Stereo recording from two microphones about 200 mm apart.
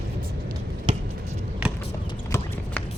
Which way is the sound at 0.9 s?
30° right (ahead or behind).